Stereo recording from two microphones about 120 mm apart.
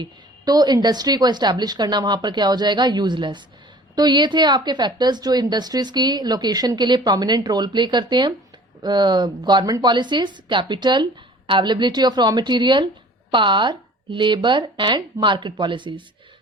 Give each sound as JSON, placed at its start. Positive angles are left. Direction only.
{"t": 0.0, "sound": "a woman's voice", "side_deg": -35}